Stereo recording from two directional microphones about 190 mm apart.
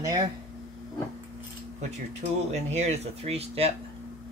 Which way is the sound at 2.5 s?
35° right (ahead or behind).